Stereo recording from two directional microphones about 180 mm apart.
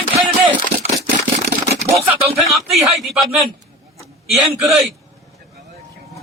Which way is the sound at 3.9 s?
Centre (ahead or behind).